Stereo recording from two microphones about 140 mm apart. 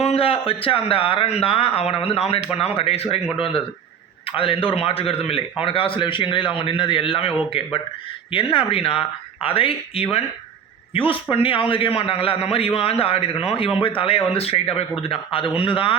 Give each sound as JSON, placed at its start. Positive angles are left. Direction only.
{"t": 0.0, "sound": "a man's voice", "side_deg": 45}